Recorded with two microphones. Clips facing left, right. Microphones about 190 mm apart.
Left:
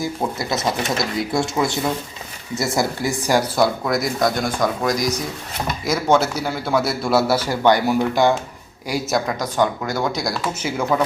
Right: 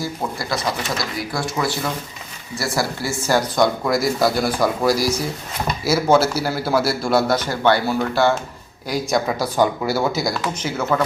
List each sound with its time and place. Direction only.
0.0 s a man's voice: 20° left (ahead or behind)
8.9 s speech: centre (ahead or behind)
10.7 s a man's voice: 10° left (ahead or behind)